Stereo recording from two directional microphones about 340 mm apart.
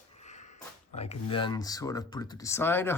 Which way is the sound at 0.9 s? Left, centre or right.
Centre.